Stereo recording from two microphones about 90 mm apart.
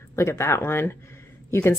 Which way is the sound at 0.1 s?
30° left (ahead or behind).